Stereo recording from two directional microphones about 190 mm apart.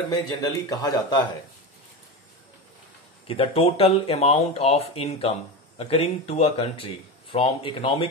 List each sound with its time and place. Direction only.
0.1 s speech: 20° left (ahead or behind)
3.3 s speech: 30° left (ahead or behind)